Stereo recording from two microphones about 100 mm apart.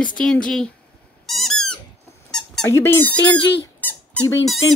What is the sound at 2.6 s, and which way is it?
Speech, 30° left (ahead or behind).